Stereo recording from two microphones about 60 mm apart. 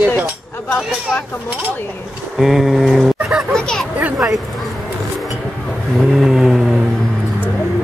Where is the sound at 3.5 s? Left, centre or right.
Centre.